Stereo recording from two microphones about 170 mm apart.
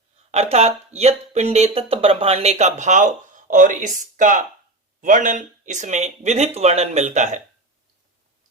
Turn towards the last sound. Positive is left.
turn(degrees=-45)  # may be behind; listen again after turning